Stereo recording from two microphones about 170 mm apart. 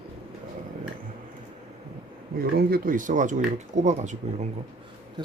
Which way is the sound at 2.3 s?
60° right (ahead or behind).